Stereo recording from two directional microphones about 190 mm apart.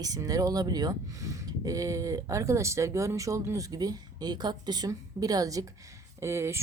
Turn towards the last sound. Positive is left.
turn(degrees=-15)  # may be behind; listen again after turning